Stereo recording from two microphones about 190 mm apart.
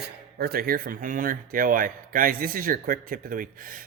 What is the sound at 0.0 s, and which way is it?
Speech, 55° right (ahead or behind).